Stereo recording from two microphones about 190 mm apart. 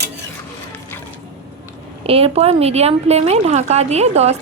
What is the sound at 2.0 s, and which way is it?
Speech, 30° right (ahead or behind).